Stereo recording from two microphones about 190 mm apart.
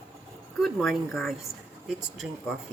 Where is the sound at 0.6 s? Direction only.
Centre (ahead or behind).